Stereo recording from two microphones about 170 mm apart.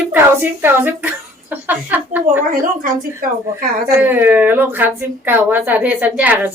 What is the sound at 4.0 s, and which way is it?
Speech, 10° right (ahead or behind).